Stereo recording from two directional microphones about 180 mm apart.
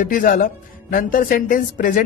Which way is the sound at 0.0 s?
50° left (ahead or behind).